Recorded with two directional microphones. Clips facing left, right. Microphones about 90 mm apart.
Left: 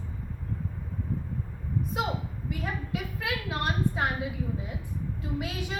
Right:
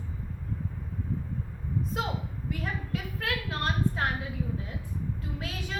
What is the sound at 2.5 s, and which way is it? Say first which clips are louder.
A woman's voice: left 1 dB; 10° left (ahead or behind).